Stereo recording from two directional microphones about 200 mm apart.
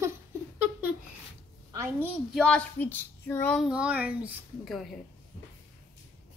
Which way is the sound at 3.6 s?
5° right (ahead or behind).